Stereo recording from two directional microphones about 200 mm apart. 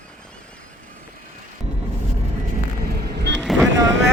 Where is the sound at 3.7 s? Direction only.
65° right (ahead or behind).